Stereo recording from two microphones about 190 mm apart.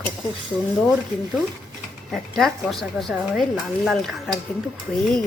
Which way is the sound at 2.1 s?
Centre (ahead or behind).